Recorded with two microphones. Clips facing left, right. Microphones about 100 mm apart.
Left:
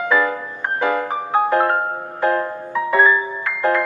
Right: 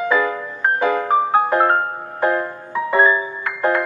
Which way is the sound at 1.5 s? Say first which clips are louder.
Right 1 dB; 20° right (ahead or behind).